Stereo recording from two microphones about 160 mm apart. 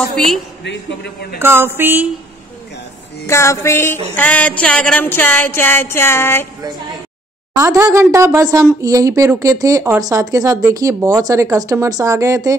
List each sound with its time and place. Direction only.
0.1 s a woman's voice: centre (ahead or behind)
0.7 s a man's voice: 90° left
1.4 s mantra: 15° right (ahead or behind)
3.3 s speech: 15° left (ahead or behind)
7.5 s speech: 20° right (ahead or behind)